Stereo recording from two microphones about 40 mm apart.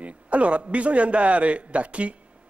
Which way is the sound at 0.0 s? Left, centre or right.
Right.